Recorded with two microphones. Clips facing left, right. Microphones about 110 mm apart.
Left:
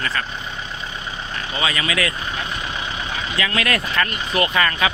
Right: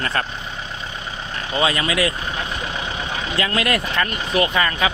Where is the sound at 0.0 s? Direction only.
45° right (ahead or behind).